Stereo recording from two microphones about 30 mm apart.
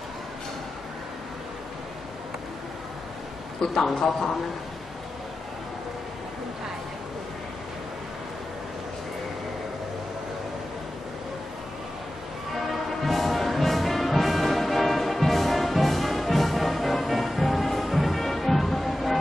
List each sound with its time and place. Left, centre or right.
3.9 s a man's voice: centre
13.0 s music: centre